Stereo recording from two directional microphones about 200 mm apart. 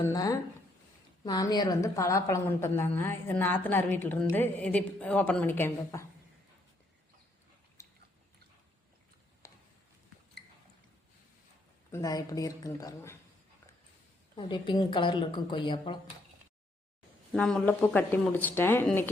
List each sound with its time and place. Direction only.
0.0 s a woman's voice: 15° left (ahead or behind)
7.8 s biting: 15° left (ahead or behind)
9.4 s a sound: 15° left (ahead or behind)
11.9 s a woman's voice: 15° left (ahead or behind)
14.3 s speech: 25° left (ahead or behind)
17.3 s a woman's voice: 5° left (ahead or behind)